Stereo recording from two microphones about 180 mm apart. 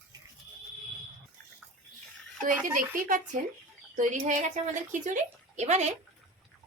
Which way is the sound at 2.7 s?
45° right (ahead or behind).